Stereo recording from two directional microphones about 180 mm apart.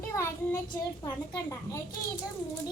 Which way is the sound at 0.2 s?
15° left (ahead or behind).